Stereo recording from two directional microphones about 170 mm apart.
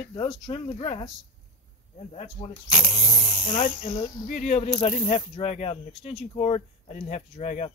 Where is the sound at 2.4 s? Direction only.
30° left (ahead or behind).